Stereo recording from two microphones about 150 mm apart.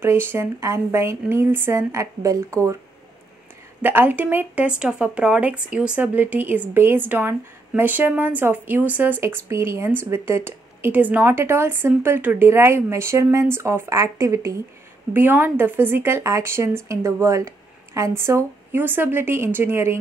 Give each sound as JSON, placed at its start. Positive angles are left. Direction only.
{"t": 0.0, "sound": "speech", "side_deg": -15}
{"t": 3.8, "sound": "speech", "side_deg": -15}